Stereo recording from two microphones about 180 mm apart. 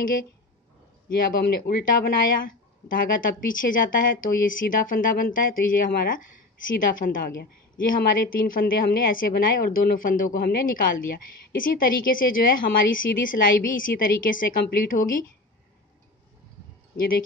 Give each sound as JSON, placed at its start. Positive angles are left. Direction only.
{"t": 0.0, "sound": "a woman's voice", "side_deg": 50}
{"t": 16.9, "sound": "speech", "side_deg": 55}